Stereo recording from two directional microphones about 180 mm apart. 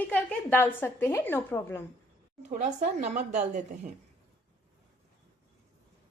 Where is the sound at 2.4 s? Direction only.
40° right (ahead or behind).